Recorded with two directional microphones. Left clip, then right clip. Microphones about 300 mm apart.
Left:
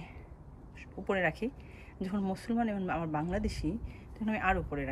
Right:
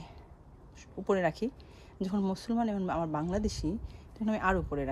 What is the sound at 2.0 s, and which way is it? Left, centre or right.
Speech, centre.